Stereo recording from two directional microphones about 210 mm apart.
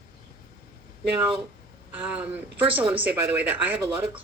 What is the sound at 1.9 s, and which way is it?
Speech, 5° right (ahead or behind).